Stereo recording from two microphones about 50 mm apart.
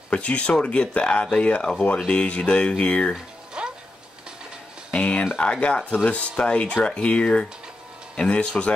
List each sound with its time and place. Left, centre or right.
0.1 s speech: left
3.6 s music: centre
4.9 s speech: left